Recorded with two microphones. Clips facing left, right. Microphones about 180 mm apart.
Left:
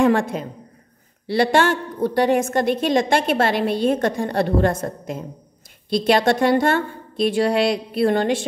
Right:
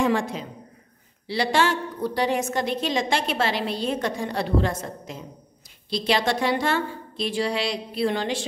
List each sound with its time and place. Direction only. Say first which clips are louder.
0.0 s a man's voice: left 5 dB; 55° left (ahead or behind)